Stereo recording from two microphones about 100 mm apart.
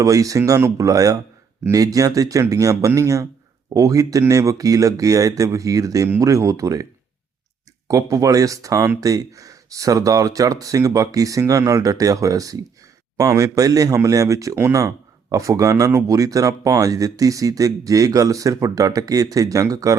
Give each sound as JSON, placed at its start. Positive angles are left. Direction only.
{"t": 0.0, "sound": "speech", "side_deg": -35}
{"t": 7.9, "sound": "speech", "side_deg": -35}